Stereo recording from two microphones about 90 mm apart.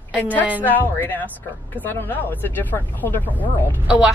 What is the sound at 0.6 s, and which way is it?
Speech, 20° left (ahead or behind).